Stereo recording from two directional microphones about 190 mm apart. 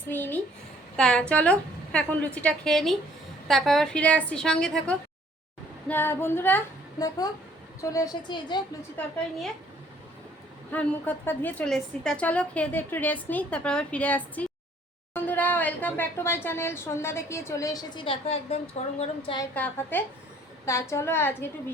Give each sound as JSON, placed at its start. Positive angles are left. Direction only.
{"t": 0.1, "sound": "a woman's voice", "side_deg": 10}
{"t": 7.8, "sound": "a woman's voice", "side_deg": 15}
{"t": 9.0, "sound": "speech", "side_deg": 10}
{"t": 10.7, "sound": "speech", "side_deg": 10}
{"t": 19.5, "sound": "speech", "side_deg": 10}